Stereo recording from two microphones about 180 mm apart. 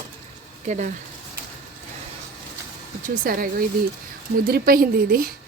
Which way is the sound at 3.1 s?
50° right (ahead or behind).